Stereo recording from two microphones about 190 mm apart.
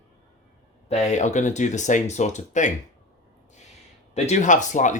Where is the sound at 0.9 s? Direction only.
35° left (ahead or behind).